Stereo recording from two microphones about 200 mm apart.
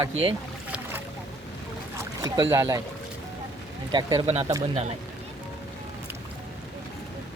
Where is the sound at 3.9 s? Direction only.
20° right (ahead or behind).